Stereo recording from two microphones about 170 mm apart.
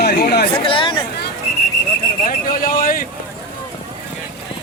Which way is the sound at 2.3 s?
55° left (ahead or behind).